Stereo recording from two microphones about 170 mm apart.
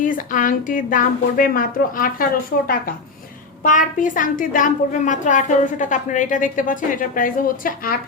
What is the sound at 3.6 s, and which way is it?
A woman's voice, 50° left (ahead or behind).